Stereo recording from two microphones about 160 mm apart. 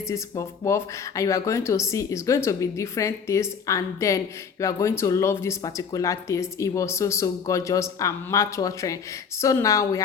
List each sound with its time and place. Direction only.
0.1 s speech: 20° left (ahead or behind)